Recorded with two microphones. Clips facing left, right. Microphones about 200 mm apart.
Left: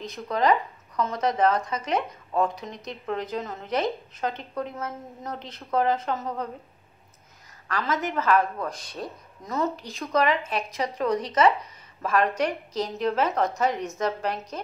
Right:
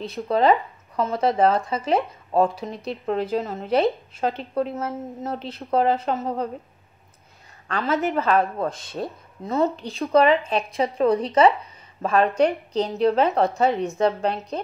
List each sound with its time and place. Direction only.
0.0 s speech: 30° right (ahead or behind)
7.6 s a woman's voice: 30° right (ahead or behind)